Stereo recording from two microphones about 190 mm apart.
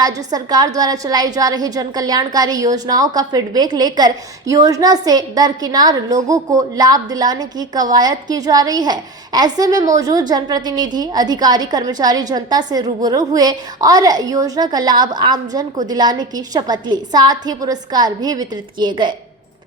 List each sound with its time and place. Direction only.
0.0 s a woman's voice: 20° right (ahead or behind)